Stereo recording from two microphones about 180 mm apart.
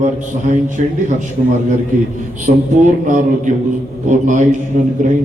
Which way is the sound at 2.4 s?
45° right (ahead or behind).